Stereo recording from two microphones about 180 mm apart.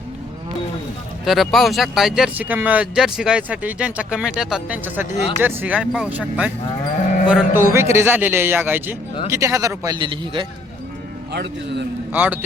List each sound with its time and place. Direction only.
1.2 s a man's voice: centre (ahead or behind); by 10.4 s 25° right (ahead or behind)
11.3 s a man's voice: 65° right (ahead or behind)
12.1 s a man's voice: 10° right (ahead or behind)